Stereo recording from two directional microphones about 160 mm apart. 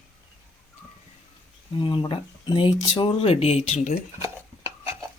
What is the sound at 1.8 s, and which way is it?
Speech, 30° left (ahead or behind).